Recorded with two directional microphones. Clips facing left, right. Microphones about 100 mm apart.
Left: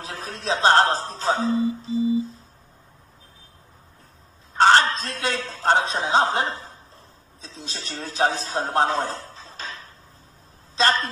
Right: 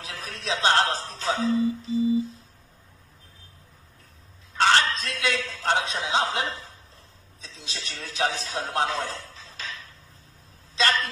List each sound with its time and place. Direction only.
0.0 s a man's voice: 35° left (ahead or behind)
4.6 s a man's voice: 35° left (ahead or behind)